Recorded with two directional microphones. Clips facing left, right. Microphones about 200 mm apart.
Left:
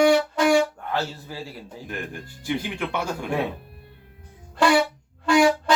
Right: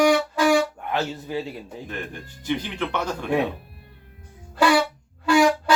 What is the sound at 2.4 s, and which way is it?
Speech, 10° left (ahead or behind).